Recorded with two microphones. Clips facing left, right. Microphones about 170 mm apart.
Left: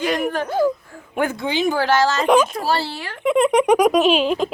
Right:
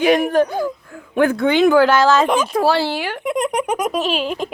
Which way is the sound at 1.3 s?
60° right (ahead or behind).